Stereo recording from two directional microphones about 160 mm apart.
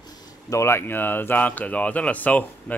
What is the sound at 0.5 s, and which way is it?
Speech, 15° left (ahead or behind).